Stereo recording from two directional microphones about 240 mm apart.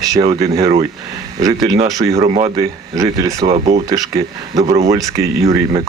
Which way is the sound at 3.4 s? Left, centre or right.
Right.